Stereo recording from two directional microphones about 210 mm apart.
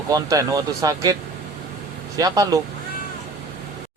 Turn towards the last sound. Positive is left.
turn(degrees=-15)  # may be behind; listen again after turning